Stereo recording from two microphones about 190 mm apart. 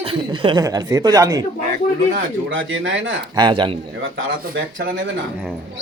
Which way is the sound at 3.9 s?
90° right.